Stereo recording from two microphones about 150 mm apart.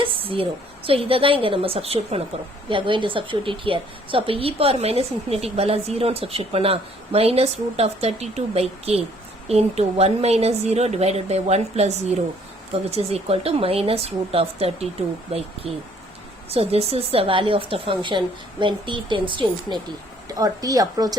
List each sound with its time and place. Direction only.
0.9 s a woman's voice: 40° right (ahead or behind)